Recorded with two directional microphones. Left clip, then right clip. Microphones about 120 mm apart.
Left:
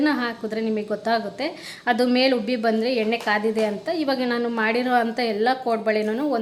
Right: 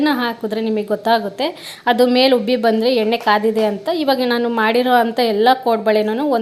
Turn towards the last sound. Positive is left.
turn(degrees=-20)  # may be behind; listen again after turning